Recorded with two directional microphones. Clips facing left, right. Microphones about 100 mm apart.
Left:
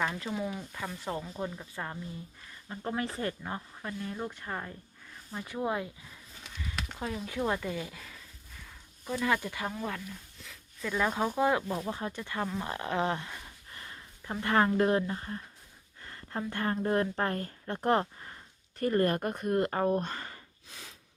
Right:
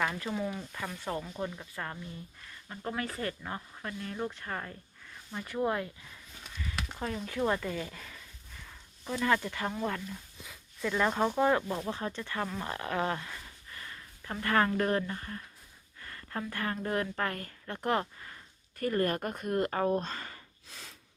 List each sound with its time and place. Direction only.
0.3 s speech: 5° left (ahead or behind)
0.9 s speech: 15° left (ahead or behind)
1.2 s speech: 5° left (ahead or behind); by 3.3 s 25° left (ahead or behind)
3.4 s speech: 10° left (ahead or behind)
6.7 s a sound: centre (ahead or behind)
7.3 s speech: 5° left (ahead or behind)
10.3 s a sound: 15° right (ahead or behind)
10.8 s speech: 5° left (ahead or behind)
12.7 s speech: 20° left (ahead or behind)
13.7 s a sound: 25° left (ahead or behind)
14.4 s speech: 20° left (ahead or behind)
19.8 s a sound: 15° left (ahead or behind)